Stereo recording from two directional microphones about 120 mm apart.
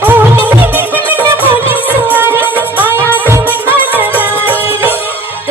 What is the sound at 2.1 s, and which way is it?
Music, 15° right (ahead or behind).